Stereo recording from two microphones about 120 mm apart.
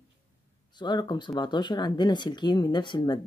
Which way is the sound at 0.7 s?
40° left (ahead or behind).